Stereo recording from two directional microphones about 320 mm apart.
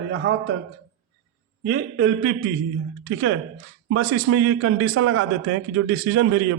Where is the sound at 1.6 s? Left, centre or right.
Right.